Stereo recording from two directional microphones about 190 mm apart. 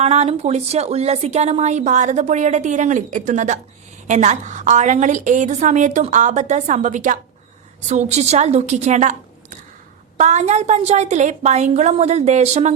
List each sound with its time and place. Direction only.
0.0 s a woman's voice: 35° right (ahead or behind)